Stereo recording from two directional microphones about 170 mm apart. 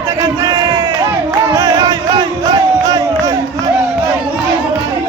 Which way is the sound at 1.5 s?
20° right (ahead or behind).